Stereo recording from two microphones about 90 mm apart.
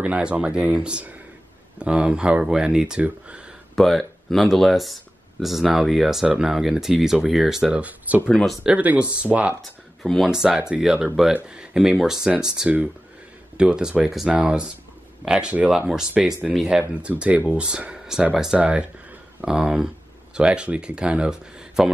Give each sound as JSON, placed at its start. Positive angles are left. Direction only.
{"t": 0.0, "sound": "speech", "side_deg": -15}
{"t": 3.7, "sound": "speech", "side_deg": 5}
{"t": 8.1, "sound": "speech", "side_deg": -15}
{"t": 9.6, "sound": "speech", "side_deg": 0}